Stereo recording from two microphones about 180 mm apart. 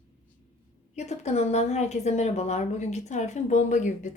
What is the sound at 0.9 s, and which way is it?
A woman's voice, 40° left (ahead or behind).